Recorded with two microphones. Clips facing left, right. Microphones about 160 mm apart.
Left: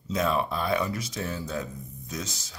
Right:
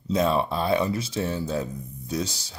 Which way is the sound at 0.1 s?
30° right (ahead or behind).